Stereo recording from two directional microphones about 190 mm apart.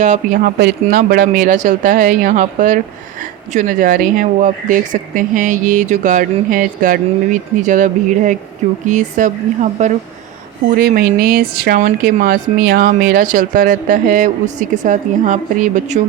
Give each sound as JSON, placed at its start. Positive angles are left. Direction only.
{"t": 0.0, "sound": "speech", "side_deg": -40}
{"t": 0.6, "sound": "speech", "side_deg": -50}
{"t": 10.8, "sound": "speech", "side_deg": -50}